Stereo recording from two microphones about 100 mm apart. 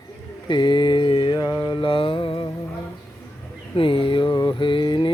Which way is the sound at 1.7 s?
60° left (ahead or behind).